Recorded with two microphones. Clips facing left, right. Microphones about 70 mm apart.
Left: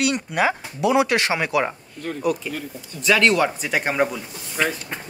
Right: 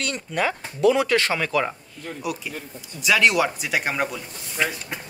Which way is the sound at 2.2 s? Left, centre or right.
Centre.